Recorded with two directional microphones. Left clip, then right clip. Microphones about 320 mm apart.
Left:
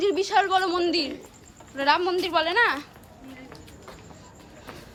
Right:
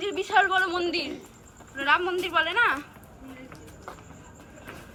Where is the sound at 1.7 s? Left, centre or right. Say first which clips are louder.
Left 2 dB; centre.